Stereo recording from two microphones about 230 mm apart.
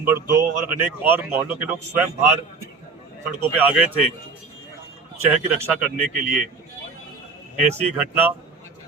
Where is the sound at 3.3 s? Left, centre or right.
Right.